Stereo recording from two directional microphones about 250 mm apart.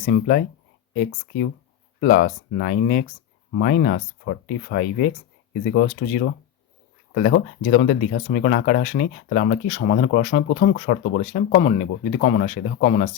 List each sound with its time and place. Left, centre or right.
0.0 s speech: left
2.0 s speech: left